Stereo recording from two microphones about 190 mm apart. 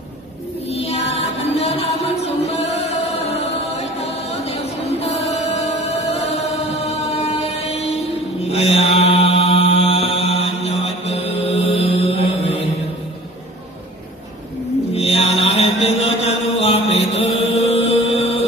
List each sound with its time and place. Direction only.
0.7 s music: 30° left (ahead or behind)
8.5 s mantra: 30° left (ahead or behind)
15.0 s mantra: 35° left (ahead or behind)
17.3 s music: 35° left (ahead or behind)